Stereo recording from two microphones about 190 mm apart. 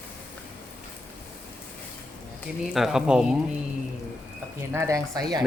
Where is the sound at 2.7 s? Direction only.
Centre (ahead or behind).